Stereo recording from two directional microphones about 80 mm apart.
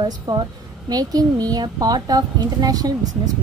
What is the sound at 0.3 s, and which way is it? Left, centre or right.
A woman's voice, right.